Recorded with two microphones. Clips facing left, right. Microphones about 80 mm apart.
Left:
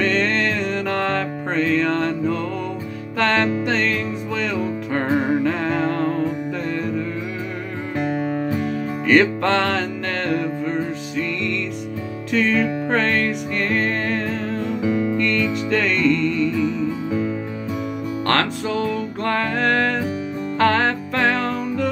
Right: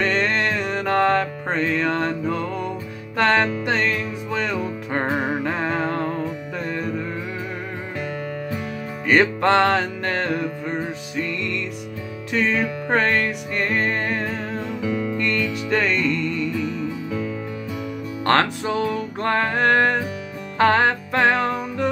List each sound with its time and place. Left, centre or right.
0.0 s music: centre
9.0 s music: centre
12.3 s music: centre
14.8 s music: centre
15.1 s music: centre
18.2 s music: right